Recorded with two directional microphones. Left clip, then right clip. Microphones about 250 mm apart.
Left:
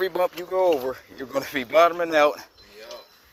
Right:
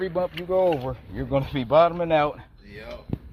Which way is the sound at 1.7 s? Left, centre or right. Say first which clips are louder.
Even; left.